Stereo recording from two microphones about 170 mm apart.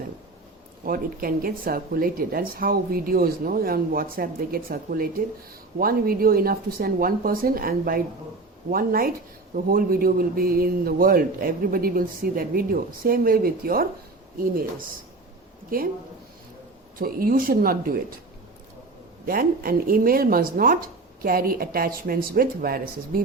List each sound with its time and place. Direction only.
0.9 s speech: 55° right (ahead or behind)
15.7 s speech: 55° right (ahead or behind)
17.0 s speech: 60° right (ahead or behind)
19.2 s speech: 60° right (ahead or behind)